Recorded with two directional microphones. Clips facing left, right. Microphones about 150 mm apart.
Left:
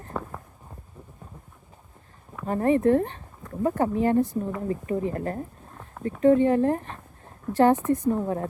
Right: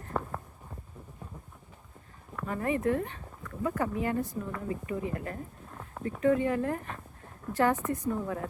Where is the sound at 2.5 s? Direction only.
35° left (ahead or behind).